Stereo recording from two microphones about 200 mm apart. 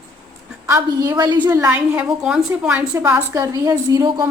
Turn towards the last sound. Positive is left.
turn(degrees=-20)  # may be behind; listen again after turning